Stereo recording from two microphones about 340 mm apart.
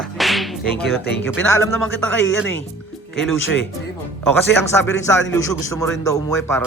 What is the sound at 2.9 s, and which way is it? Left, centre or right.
Music, centre.